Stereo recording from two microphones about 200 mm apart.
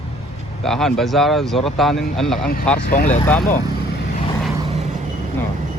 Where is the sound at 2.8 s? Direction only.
45° left (ahead or behind).